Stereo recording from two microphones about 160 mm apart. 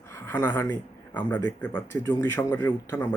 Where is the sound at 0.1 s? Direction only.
15° left (ahead or behind).